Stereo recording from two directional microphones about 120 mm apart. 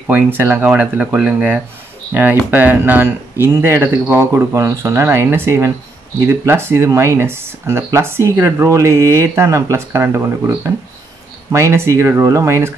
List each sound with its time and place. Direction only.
0.0 s speech: 15° right (ahead or behind)